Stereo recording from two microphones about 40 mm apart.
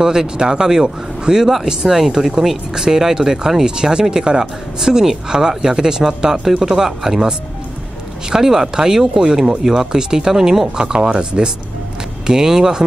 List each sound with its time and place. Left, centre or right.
0.0 s speech: centre
10.8 s speech: right